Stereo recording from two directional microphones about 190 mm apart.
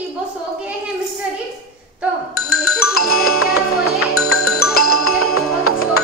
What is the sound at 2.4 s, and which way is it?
Music, 90° left.